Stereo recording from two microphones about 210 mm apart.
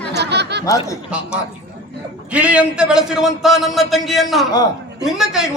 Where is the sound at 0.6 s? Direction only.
15° left (ahead or behind).